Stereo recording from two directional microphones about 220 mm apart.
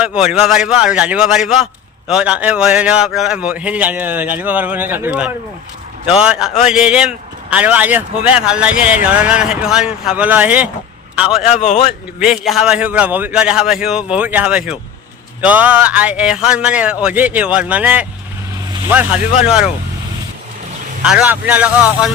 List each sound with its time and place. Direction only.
0.0 s a man's voice: 5° right (ahead or behind)
11.5 s a man's voice: 30° left (ahead or behind)
12.2 s a man's voice: centre (ahead or behind)
21.1 s a man's voice: 5° right (ahead or behind)